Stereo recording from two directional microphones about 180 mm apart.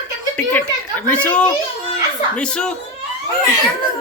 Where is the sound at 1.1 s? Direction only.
10° left (ahead or behind).